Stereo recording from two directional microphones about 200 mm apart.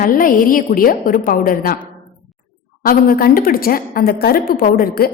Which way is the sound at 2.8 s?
45° left (ahead or behind).